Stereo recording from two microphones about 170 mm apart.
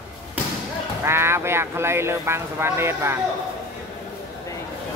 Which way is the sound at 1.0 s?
15° right (ahead or behind).